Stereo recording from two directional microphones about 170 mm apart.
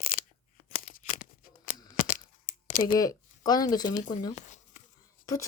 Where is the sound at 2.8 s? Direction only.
25° left (ahead or behind).